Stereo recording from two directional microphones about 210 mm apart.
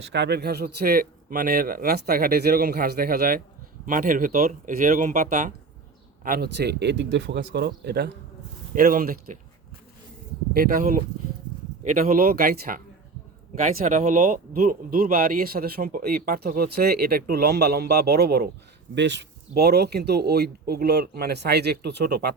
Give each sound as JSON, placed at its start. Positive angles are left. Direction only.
{"t": 0.0, "sound": "speech", "side_deg": -55}
{"t": 10.5, "sound": "speech", "side_deg": -45}